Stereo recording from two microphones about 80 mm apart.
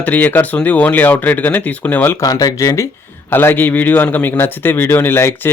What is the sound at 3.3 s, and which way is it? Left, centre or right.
A man's voice, left.